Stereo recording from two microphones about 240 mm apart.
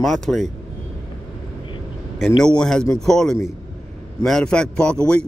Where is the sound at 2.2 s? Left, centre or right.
Centre.